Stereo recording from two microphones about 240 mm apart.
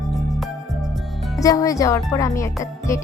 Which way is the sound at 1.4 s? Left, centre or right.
Centre.